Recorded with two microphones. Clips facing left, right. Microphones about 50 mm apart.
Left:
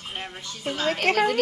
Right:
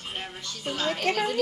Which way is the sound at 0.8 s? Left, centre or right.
Left.